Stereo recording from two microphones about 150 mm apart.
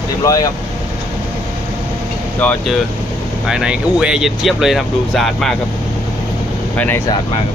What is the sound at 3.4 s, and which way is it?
Speech, 5° right (ahead or behind).